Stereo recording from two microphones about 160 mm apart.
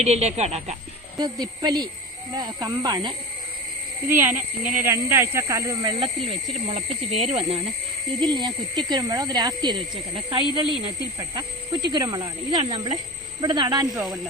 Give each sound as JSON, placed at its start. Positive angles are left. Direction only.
{"t": 0.0, "sound": "speech", "side_deg": -45}
{"t": 1.2, "sound": "speech", "side_deg": -25}
{"t": 4.8, "sound": "speech", "side_deg": -15}
{"t": 8.2, "sound": "speech", "side_deg": -30}